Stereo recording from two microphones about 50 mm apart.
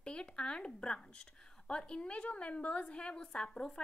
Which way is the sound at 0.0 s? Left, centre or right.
Centre.